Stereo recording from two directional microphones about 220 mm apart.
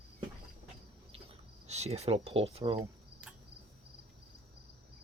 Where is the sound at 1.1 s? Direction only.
30° right (ahead or behind).